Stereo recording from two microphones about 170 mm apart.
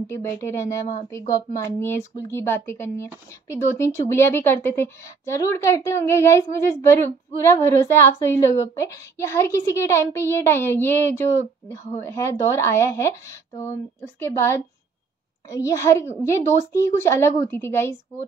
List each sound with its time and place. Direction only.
0.0 s speech: 15° left (ahead or behind)
14.2 s speech: 15° left (ahead or behind)